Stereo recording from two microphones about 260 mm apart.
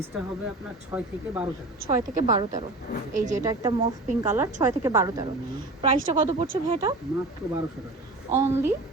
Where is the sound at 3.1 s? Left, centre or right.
Right.